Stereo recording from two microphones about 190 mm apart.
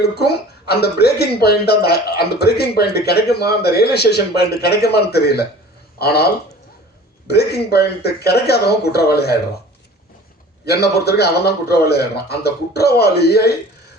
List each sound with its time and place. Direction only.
0.0 s speech: 55° left (ahead or behind)
10.7 s speech: 60° left (ahead or behind)